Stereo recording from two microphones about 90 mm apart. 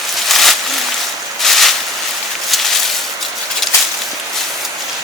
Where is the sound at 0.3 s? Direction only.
Centre (ahead or behind).